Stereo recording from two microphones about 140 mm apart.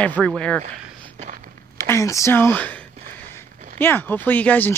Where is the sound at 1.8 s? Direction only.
20° left (ahead or behind).